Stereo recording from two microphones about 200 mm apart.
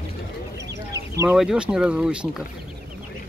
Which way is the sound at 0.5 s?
15° right (ahead or behind).